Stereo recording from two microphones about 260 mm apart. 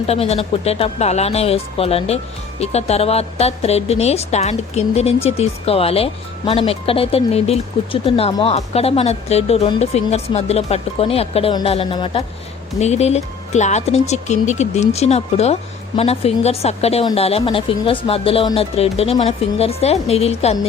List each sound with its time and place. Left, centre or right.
0.1 s a woman's voice: left